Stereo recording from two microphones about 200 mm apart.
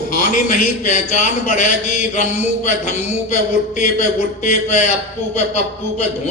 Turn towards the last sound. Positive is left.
turn(degrees=35)  # may be behind; listen again after turning